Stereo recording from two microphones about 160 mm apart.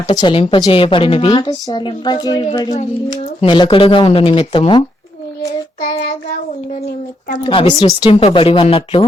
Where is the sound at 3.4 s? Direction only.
30° left (ahead or behind).